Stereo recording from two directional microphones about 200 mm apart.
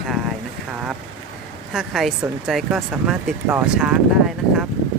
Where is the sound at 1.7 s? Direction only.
Centre (ahead or behind).